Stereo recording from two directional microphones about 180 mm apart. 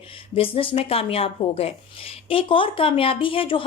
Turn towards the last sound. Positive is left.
turn(degrees=30)  # may be behind; listen again after turning